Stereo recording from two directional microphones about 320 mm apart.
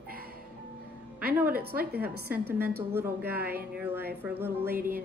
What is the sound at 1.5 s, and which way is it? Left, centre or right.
Speech, right.